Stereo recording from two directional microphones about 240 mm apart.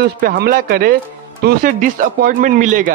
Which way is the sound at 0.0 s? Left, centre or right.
Right.